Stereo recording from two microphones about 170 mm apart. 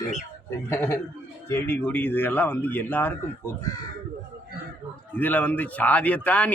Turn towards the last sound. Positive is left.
turn(degrees=10)  # may be behind; listen again after turning